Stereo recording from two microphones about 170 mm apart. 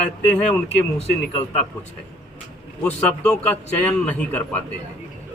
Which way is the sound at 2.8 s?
5° left (ahead or behind).